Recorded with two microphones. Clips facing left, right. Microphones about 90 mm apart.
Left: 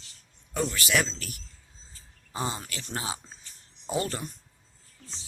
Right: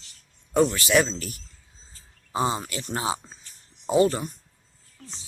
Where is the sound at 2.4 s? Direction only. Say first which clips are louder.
Right 7 dB; 25° right (ahead or behind).